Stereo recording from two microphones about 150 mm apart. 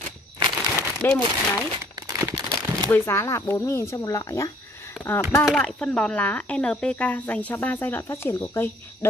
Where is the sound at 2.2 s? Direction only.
20° right (ahead or behind).